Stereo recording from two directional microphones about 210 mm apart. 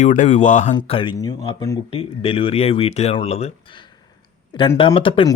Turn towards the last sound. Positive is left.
turn(degrees=25)  # may be behind; listen again after turning